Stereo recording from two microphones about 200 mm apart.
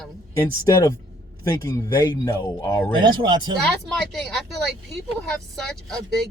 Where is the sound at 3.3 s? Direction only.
20° right (ahead or behind).